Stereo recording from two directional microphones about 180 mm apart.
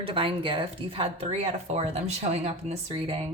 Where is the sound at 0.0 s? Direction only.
30° right (ahead or behind).